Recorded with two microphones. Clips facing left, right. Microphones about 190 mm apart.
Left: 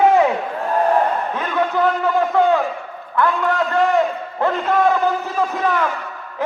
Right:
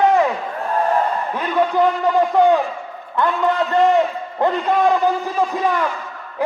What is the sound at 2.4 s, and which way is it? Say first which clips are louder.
Speech: right 2 dB; 15° right (ahead or behind).